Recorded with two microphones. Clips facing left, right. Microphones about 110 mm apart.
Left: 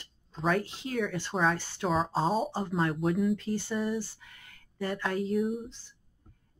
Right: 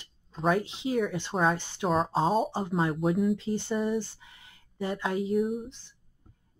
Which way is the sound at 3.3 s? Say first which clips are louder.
Right 2 dB; 20° right (ahead or behind).